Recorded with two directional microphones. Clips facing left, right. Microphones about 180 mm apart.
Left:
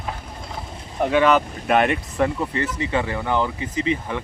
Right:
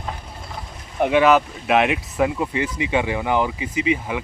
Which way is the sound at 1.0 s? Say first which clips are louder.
Right 2 dB; 10° right (ahead or behind).